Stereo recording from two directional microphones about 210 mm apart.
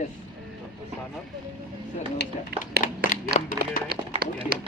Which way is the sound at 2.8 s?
40° left (ahead or behind).